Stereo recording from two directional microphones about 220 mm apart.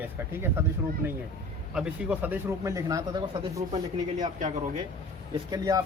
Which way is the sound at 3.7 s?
30° right (ahead or behind).